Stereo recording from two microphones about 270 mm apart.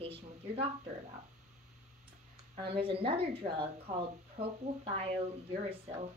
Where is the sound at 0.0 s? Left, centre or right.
Right.